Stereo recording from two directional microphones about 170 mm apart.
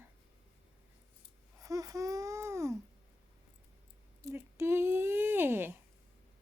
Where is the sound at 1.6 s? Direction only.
20° right (ahead or behind).